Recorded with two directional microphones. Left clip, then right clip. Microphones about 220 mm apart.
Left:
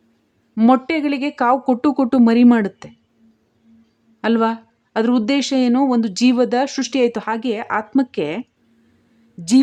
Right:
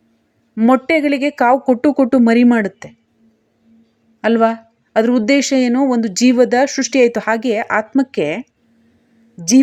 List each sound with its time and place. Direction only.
0.7 s a woman's voice: 5° right (ahead or behind)
4.2 s a woman's voice: 5° right (ahead or behind)